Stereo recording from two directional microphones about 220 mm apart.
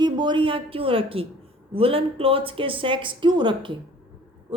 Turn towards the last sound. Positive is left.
turn(degrees=-20)  # may be behind; listen again after turning